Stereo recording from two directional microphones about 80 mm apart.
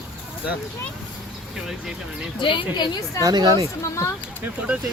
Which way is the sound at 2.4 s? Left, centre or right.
Left.